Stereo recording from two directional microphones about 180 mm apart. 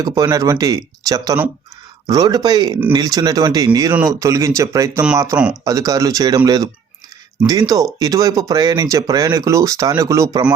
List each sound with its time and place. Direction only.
0.0 s speech: 20° right (ahead or behind)